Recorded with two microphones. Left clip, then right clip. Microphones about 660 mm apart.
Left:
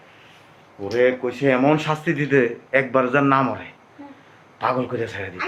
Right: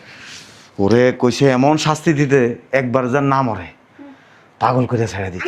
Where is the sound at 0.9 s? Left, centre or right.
Right.